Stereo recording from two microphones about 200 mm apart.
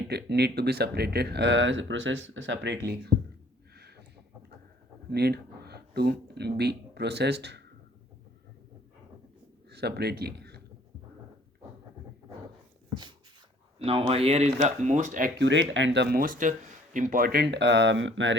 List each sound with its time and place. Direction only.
0.1 s speech: 55° right (ahead or behind)
3.8 s a sound: 55° right (ahead or behind)
5.1 s speech: 55° right (ahead or behind)
9.6 s speech: 55° right (ahead or behind)
13.7 s speech: 30° right (ahead or behind)
15.4 s speech: 65° right (ahead or behind)